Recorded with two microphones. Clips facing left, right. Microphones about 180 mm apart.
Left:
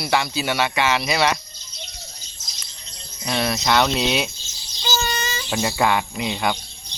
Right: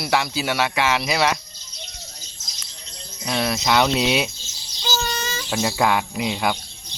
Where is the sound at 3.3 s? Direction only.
Centre (ahead or behind).